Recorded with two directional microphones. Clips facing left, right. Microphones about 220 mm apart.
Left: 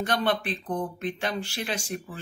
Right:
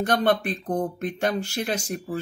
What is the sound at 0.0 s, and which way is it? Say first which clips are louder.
Speech: right 4 dB; 45° right (ahead or behind).